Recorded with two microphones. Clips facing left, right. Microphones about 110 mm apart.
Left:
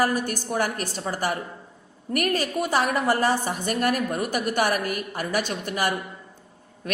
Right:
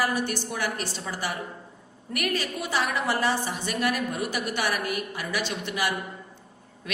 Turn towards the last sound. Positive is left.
turn(degrees=45)  # may be behind; listen again after turning